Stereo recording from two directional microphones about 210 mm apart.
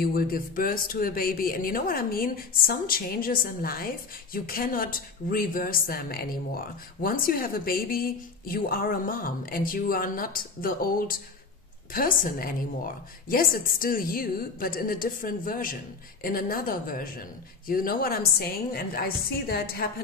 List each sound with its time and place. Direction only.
0.0 s a woman's voice: 45° left (ahead or behind)